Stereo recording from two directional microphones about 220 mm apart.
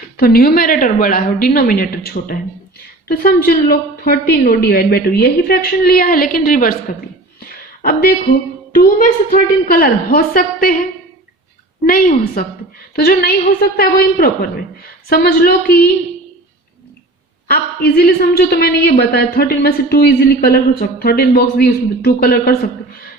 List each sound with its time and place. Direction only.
0.2 s a woman's voice: 45° left (ahead or behind)
7.3 s a sound: 40° left (ahead or behind)
8.7 s a woman's voice: 40° left (ahead or behind)
11.9 s a woman's voice: 40° left (ahead or behind)
17.5 s a woman's voice: 45° left (ahead or behind)